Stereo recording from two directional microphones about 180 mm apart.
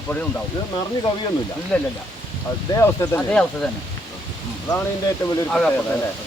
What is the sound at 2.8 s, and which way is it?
Speech, 15° left (ahead or behind).